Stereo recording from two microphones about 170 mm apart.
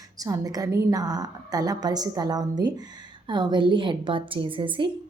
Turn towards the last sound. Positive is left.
turn(degrees=-30)  # may be behind; listen again after turning